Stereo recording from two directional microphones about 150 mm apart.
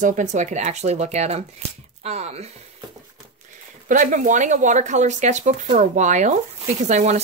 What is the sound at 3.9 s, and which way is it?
A woman's voice, 60° right (ahead or behind).